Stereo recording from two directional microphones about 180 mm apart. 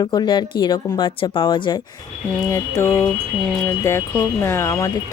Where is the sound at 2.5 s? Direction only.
15° left (ahead or behind).